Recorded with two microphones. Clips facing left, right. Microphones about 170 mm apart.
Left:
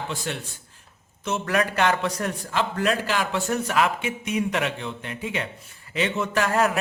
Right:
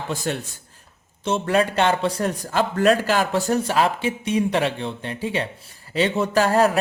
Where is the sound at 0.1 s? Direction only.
40° right (ahead or behind).